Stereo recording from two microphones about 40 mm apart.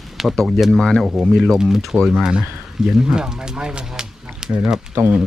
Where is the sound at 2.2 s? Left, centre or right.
Right.